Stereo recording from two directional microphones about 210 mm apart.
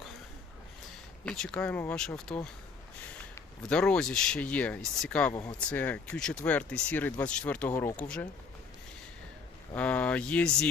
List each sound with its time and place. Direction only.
1.2 s speech: 5° left (ahead or behind)
3.6 s speech: 5° left (ahead or behind)
9.7 s speech: 5° left (ahead or behind)